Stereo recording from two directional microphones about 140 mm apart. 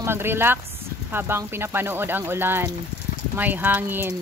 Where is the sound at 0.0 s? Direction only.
15° right (ahead or behind).